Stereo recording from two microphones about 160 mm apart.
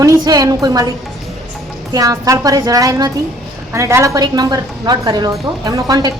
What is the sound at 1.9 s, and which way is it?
Speech, 20° right (ahead or behind).